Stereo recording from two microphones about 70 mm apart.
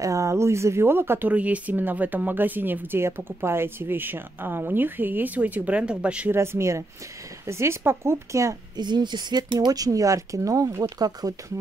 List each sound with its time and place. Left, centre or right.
0.0 s speech: right
1.3 s speech: right
6.3 s speech: right
8.7 s speech: right
10.8 s speech: right